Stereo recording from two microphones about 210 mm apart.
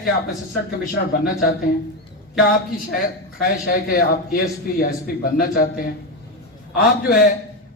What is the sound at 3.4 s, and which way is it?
A man's voice, 45° left (ahead or behind).